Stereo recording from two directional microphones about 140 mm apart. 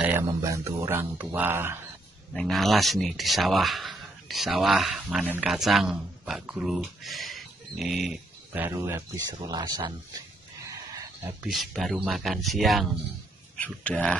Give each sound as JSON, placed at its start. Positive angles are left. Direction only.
{"t": 0.4, "sound": "speech", "side_deg": -20}
{"t": 2.3, "sound": "speech", "side_deg": 0}
{"t": 8.5, "sound": "speech", "side_deg": -20}
{"t": 11.4, "sound": "speech", "side_deg": 0}